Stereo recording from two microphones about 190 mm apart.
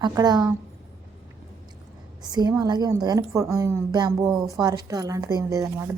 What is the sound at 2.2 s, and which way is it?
A woman's voice, 20° right (ahead or behind).